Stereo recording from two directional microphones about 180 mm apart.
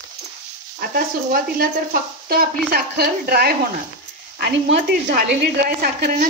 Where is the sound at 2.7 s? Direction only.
60° right (ahead or behind).